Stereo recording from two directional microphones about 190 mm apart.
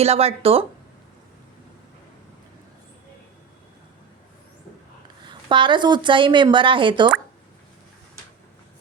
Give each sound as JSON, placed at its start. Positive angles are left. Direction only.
{"t": 0.0, "sound": "speech", "side_deg": -30}
{"t": 5.2, "sound": "a woman's voice", "side_deg": -25}